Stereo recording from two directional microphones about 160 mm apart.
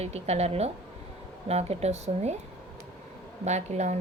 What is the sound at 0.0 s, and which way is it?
A woman's voice, 40° right (ahead or behind).